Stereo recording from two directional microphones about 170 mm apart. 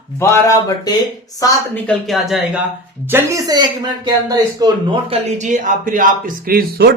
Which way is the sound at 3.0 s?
15° right (ahead or behind).